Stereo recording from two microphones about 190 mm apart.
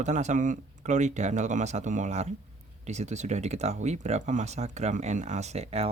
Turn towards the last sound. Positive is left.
turn(degrees=-35)  # may be behind; listen again after turning